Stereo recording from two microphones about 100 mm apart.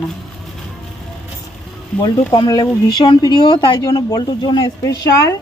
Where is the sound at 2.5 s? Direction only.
45° left (ahead or behind).